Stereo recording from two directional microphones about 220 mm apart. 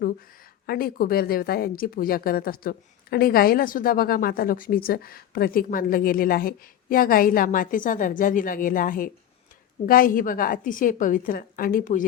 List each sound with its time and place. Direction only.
0.7 s speech: 40° left (ahead or behind)